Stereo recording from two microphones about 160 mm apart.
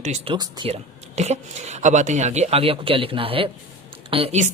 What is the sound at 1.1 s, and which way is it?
Speech, 45° right (ahead or behind).